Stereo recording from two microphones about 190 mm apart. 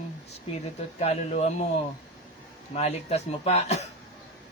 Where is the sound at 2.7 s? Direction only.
35° left (ahead or behind).